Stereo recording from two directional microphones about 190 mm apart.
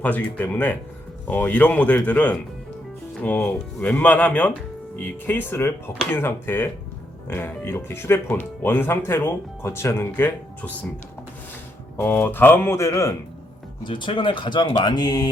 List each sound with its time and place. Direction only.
0.0 s speech: 10° left (ahead or behind)
11.9 s speech: 10° left (ahead or behind)